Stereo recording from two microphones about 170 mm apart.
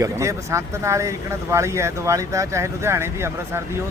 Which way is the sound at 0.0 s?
20° right (ahead or behind).